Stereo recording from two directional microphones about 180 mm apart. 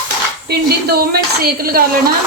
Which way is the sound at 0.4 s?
60° right (ahead or behind).